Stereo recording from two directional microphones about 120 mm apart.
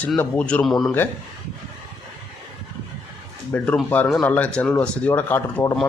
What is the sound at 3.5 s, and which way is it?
Speech, 15° left (ahead or behind).